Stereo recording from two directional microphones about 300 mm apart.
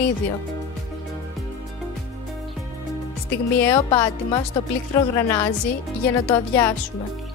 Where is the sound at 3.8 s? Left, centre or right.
Centre.